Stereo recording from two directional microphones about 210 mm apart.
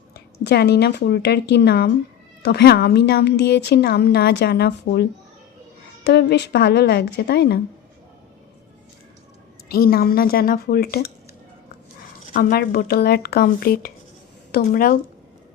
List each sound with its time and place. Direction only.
0.1 s a woman's voice: 50° left (ahead or behind)
6.1 s a woman's voice: 55° left (ahead or behind)
9.6 s a woman's voice: 45° left (ahead or behind)
12.2 s a woman's voice: 45° left (ahead or behind)